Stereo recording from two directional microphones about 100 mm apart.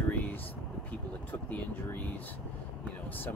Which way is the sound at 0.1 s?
15° left (ahead or behind).